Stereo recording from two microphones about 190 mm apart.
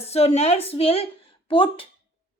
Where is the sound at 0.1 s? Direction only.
35° left (ahead or behind).